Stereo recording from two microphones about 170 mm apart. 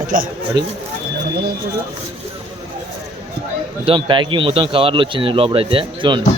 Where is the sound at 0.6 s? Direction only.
90° right.